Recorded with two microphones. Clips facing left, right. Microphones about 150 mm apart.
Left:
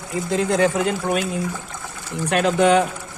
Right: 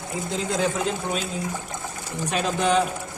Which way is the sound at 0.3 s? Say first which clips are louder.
Left 7 dB; 65° left (ahead or behind).